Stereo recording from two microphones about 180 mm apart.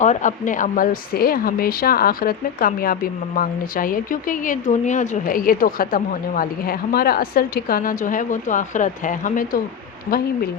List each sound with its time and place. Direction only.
0.0 s a woman's voice: 45° left (ahead or behind)